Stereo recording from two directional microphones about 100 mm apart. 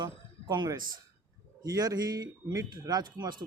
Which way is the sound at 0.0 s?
45° right (ahead or behind).